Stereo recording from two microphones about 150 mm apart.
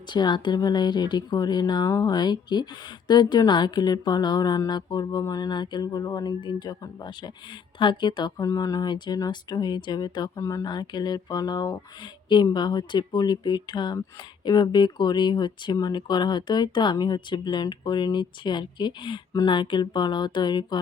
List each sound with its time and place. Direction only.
0.1 s speech: 30° left (ahead or behind)